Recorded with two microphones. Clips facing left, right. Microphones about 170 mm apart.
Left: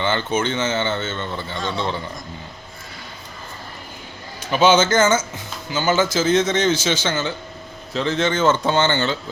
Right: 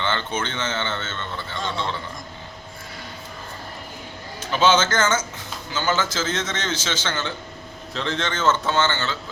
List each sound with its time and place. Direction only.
0.0 s a man's voice: 10° left (ahead or behind)
4.5 s a man's voice: 10° left (ahead or behind)